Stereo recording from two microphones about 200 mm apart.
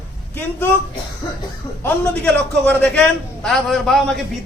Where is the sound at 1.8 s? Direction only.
10° left (ahead or behind).